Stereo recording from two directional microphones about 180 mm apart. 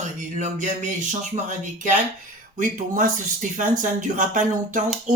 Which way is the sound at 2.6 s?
45° right (ahead or behind).